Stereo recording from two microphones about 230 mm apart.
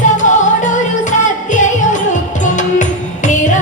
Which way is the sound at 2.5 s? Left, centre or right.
Left.